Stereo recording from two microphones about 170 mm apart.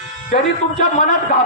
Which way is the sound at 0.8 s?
50° left (ahead or behind).